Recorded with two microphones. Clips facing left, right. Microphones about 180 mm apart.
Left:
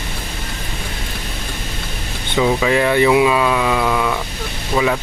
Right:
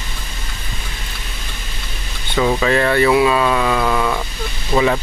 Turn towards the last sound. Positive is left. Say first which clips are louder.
# right 2 dB
turn(degrees=0)  # may be behind; listen again after turning